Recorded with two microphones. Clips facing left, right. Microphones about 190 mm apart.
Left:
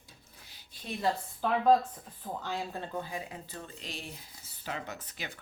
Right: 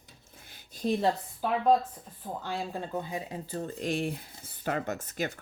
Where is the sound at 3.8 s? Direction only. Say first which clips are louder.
Right 13 dB; 50° right (ahead or behind).